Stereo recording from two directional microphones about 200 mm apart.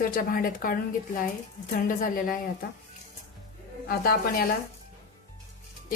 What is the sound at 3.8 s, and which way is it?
Speech, 50° left (ahead or behind).